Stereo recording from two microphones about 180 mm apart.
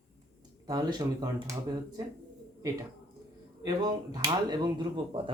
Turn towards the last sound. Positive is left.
turn(degrees=-25)  # may be behind; listen again after turning